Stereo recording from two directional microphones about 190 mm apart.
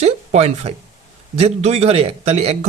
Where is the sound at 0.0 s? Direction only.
35° right (ahead or behind).